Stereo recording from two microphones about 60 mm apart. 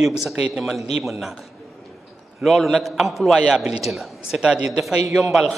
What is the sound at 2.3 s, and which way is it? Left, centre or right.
A man's voice, centre.